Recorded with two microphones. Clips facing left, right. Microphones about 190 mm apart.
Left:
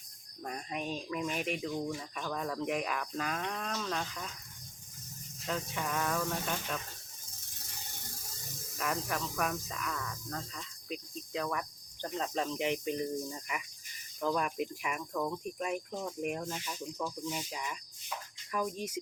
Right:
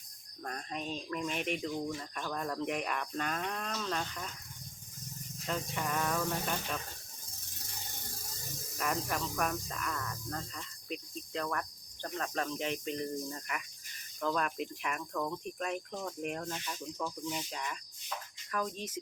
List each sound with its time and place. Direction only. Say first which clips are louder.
0.4 s speech: left 2 dB; 10° left (ahead or behind)
5.5 s speech: even; centre (ahead or behind)
8.8 s speech: even; centre (ahead or behind)
12.0 s speech: left 2 dB; 20° left (ahead or behind)